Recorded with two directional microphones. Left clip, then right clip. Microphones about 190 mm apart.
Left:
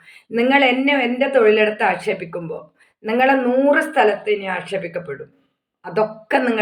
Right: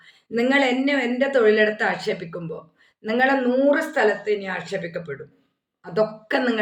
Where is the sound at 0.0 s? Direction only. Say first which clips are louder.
Left 4 dB; 15° right (ahead or behind).